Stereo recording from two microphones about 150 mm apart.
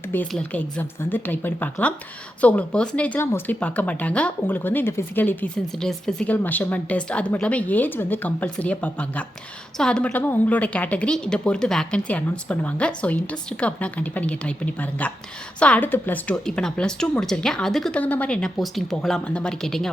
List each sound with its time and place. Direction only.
0.1 s a woman's voice: 10° left (ahead or behind)